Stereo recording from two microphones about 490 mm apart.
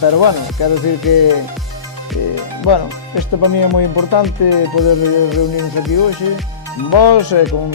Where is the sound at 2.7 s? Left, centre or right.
Left.